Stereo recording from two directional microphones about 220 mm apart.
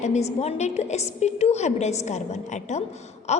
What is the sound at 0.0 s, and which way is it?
A woman's voice, 30° left (ahead or behind).